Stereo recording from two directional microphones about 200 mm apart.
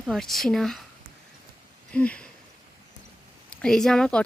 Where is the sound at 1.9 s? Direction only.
5° left (ahead or behind).